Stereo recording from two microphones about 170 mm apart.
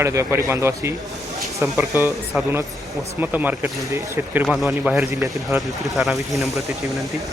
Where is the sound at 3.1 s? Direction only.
10° right (ahead or behind).